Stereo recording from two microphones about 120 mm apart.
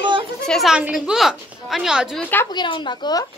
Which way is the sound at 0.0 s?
40° right (ahead or behind).